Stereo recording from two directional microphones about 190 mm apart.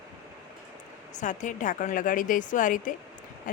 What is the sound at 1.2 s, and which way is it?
Speech, 40° left (ahead or behind).